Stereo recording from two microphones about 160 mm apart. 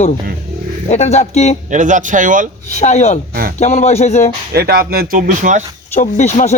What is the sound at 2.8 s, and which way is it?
Speech, 45° left (ahead or behind).